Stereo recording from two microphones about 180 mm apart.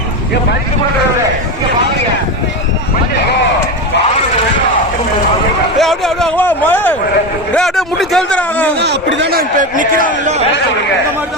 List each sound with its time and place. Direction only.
5.7 s a man's voice: centre (ahead or behind)
8.8 s a man's voice: 75° right (ahead or behind); by 10.4 s 45° right (ahead or behind)